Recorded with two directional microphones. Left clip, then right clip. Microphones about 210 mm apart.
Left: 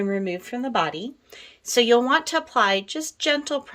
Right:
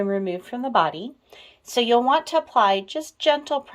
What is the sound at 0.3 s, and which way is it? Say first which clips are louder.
A woman's voice: right 1 dB; 10° left (ahead or behind).